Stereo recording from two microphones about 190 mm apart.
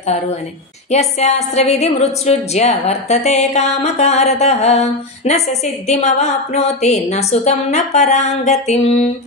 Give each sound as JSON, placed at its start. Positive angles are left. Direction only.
{"t": 0.9, "sound": "a woman's voice", "side_deg": 35}